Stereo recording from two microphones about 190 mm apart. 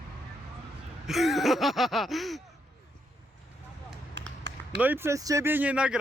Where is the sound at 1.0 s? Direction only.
Centre (ahead or behind).